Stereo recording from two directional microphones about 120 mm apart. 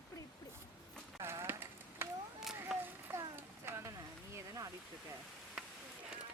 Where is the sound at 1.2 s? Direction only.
20° right (ahead or behind).